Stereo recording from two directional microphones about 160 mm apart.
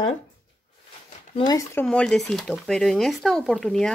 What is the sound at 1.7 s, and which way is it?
Speech, 5° left (ahead or behind).